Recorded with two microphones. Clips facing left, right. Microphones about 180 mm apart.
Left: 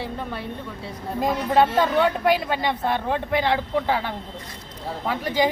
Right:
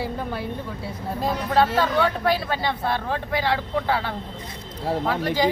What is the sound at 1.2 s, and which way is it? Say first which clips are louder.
Speech: left 2 dB; 15° left (ahead or behind).